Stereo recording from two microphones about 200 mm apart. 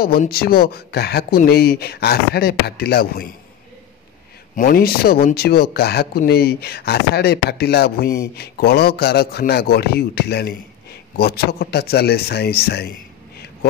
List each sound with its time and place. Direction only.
0.0 s speech: 50° left (ahead or behind)
4.6 s speech: 45° left (ahead or behind)